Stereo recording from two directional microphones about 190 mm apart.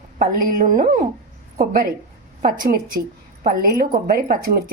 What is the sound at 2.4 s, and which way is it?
Speech, 50° right (ahead or behind).